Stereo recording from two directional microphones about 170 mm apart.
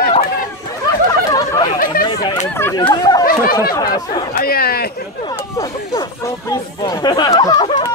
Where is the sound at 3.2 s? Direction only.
60° left (ahead or behind).